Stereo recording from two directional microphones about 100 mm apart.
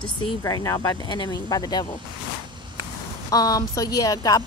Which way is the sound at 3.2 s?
40° left (ahead or behind).